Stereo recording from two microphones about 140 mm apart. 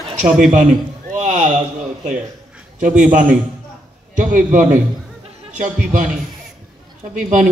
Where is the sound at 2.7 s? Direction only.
65° right (ahead or behind).